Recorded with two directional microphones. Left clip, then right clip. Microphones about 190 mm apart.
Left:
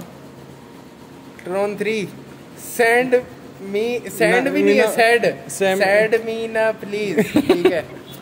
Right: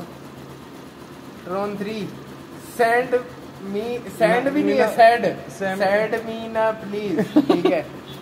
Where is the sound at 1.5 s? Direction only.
60° left (ahead or behind).